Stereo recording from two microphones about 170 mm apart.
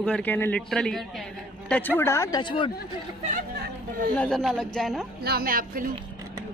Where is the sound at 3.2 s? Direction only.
45° right (ahead or behind).